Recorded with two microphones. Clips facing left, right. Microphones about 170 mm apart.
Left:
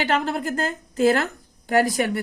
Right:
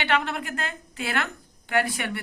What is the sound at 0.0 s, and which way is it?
A woman's voice, 40° left (ahead or behind).